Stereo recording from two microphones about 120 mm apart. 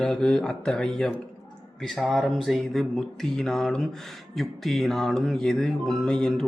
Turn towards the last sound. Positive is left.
turn(degrees=5)  # may be behind; listen again after turning